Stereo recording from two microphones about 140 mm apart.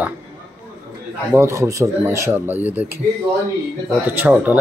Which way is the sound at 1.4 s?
20° right (ahead or behind).